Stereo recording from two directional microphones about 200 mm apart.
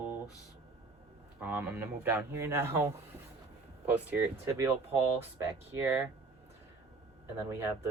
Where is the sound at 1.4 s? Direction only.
10° right (ahead or behind).